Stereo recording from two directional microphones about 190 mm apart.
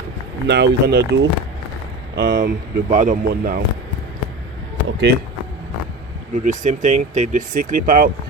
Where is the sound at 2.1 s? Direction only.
45° right (ahead or behind).